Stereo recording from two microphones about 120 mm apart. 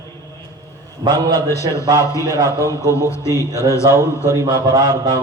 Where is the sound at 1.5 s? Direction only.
25° left (ahead or behind).